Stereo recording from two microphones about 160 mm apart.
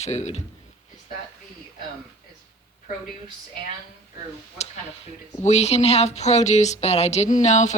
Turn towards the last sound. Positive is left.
turn(degrees=45)  # may be behind; listen again after turning